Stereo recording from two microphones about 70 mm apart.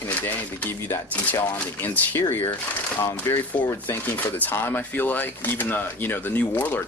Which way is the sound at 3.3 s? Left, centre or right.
Left.